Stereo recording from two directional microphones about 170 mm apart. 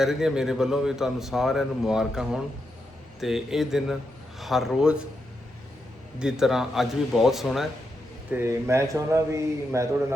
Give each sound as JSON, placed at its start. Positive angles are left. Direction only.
{"t": 0.0, "sound": "speech", "side_deg": 0}
{"t": 6.1, "sound": "speech", "side_deg": -5}
{"t": 8.3, "sound": "a man's voice", "side_deg": -15}